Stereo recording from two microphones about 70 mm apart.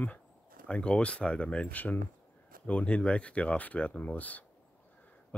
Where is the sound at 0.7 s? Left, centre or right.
Centre.